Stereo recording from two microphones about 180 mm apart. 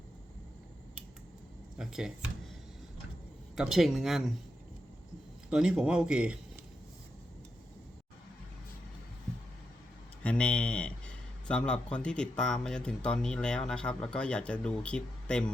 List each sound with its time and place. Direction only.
1.8 s speech: centre (ahead or behind)
3.5 s speech: centre (ahead or behind)
5.5 s speech: 5° right (ahead or behind)
10.2 s speech: 5° left (ahead or behind)